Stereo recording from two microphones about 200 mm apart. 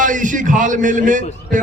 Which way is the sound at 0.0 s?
40° right (ahead or behind).